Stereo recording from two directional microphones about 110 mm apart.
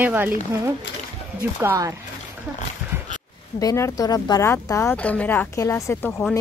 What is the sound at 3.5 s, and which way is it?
A woman's voice, 30° left (ahead or behind).